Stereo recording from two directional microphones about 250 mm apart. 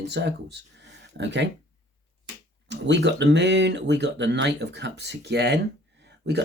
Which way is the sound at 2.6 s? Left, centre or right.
Right.